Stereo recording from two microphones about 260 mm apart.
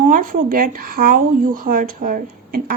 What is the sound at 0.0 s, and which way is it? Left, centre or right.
Speech, right.